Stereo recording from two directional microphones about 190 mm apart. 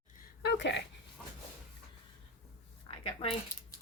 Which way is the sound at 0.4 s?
65° left (ahead or behind).